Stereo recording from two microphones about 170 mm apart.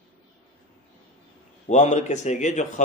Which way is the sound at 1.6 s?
45° left (ahead or behind).